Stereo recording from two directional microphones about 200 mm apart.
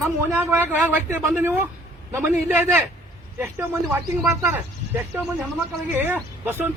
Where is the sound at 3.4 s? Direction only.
10° right (ahead or behind).